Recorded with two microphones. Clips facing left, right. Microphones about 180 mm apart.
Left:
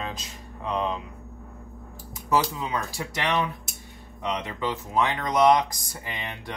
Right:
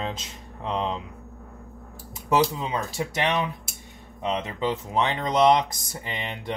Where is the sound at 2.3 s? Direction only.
20° right (ahead or behind).